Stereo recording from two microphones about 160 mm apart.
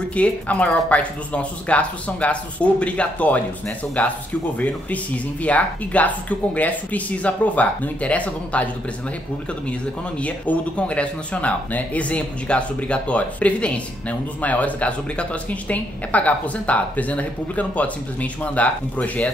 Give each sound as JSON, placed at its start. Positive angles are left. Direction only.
{"t": 0.1, "sound": "speech", "side_deg": 10}
{"t": 9.7, "sound": "speech", "side_deg": 10}